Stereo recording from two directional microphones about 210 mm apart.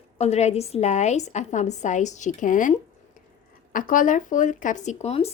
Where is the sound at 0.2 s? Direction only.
30° left (ahead or behind).